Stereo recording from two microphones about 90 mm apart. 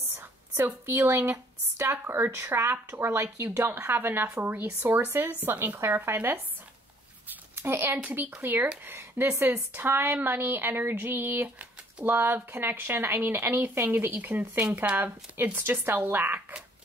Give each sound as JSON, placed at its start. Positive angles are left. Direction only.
{"t": 0.1, "sound": "a woman's voice", "side_deg": -20}